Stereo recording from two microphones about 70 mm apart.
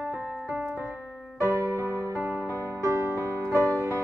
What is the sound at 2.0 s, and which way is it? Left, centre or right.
Music, right.